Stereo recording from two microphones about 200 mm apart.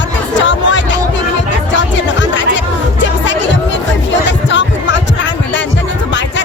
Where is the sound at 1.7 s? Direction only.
65° left (ahead or behind).